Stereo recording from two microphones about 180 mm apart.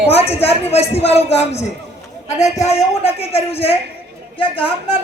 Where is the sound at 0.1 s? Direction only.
35° left (ahead or behind).